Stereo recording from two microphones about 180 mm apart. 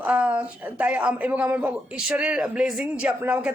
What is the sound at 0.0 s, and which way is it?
Speech, 5° right (ahead or behind).